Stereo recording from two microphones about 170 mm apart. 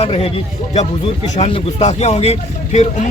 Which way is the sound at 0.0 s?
35° left (ahead or behind).